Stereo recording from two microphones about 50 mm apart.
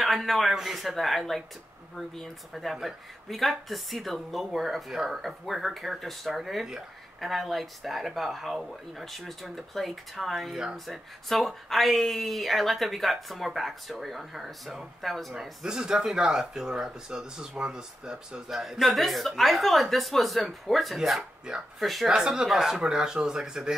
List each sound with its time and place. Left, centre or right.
0.0 s speech: centre
15.6 s speech: centre
21.5 s speech: centre
21.8 s speech: centre
22.1 s speech: centre